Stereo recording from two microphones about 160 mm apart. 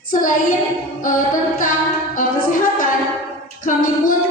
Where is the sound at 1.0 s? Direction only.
55° left (ahead or behind).